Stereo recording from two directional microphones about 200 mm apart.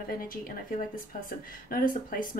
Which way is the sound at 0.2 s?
45° left (ahead or behind).